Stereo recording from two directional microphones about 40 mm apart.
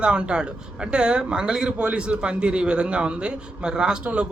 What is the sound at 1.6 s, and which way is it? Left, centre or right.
A man's voice, right.